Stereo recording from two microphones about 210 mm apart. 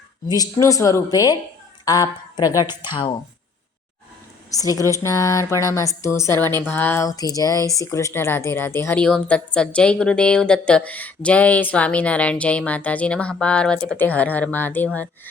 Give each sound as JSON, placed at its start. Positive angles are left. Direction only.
{"t": 0.3, "sound": "a woman's voice", "side_deg": 15}
{"t": 4.5, "sound": "a woman's voice", "side_deg": 15}